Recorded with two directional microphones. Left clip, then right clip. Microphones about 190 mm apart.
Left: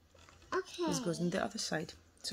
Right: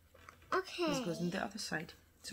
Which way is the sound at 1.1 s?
30° left (ahead or behind).